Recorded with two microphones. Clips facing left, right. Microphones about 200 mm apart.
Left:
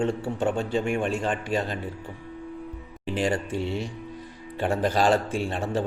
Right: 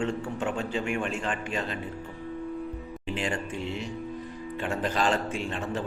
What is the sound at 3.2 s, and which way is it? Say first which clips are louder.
A man's voice: left 6 dB; 35° left (ahead or behind).